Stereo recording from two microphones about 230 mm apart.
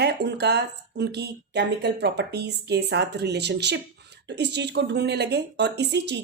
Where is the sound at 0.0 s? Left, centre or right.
Right.